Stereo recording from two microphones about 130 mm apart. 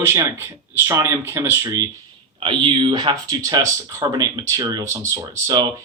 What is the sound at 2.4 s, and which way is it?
Speech, 40° right (ahead or behind).